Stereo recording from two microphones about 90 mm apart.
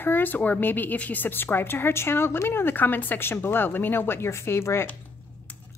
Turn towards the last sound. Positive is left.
turn(degrees=30)  # may be behind; listen again after turning